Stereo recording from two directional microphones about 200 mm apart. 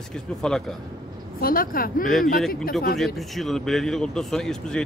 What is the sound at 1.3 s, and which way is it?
Speech, 45° left (ahead or behind).